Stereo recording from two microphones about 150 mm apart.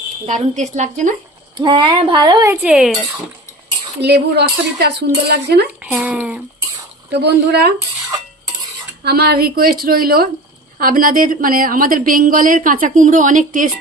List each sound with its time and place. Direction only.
0.5 s speech: 55° right (ahead or behind)
1.5 s speech: 30° right (ahead or behind)
2.5 s speech: 10° right (ahead or behind)
4.0 s speech: 90° right
5.8 s speech: 10° right (ahead or behind)
7.1 s speech: 90° right
9.0 s a woman's voice: 90° right
10.8 s a woman's voice: 70° right (ahead or behind)